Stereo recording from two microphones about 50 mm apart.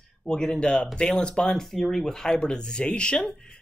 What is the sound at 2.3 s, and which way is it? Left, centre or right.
Speech, centre.